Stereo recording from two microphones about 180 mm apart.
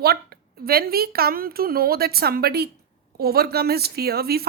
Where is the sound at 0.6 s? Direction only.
55° right (ahead or behind).